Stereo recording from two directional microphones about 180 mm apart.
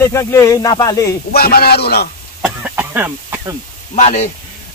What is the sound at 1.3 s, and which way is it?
Speech, 60° left (ahead or behind).